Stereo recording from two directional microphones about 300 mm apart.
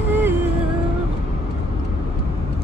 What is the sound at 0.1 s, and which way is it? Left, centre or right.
Music, centre.